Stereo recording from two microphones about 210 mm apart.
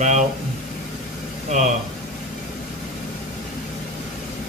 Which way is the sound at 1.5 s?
35° right (ahead or behind).